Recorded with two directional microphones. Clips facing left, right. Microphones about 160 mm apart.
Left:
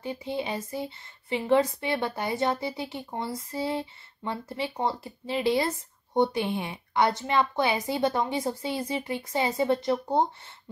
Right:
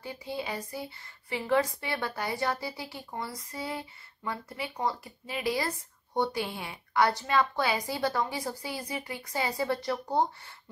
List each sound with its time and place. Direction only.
0.0 s speech: 20° left (ahead or behind)